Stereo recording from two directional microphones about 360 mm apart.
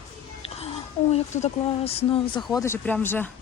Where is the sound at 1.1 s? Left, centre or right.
Centre.